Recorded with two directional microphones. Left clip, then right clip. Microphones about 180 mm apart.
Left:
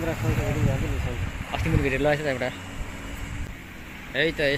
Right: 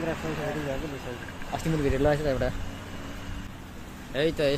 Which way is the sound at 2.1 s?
15° left (ahead or behind).